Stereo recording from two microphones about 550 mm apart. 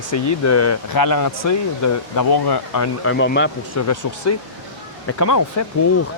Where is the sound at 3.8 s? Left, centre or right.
Left.